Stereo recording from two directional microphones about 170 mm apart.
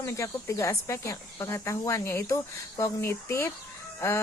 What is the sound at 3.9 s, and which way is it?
Fowl, 15° left (ahead or behind).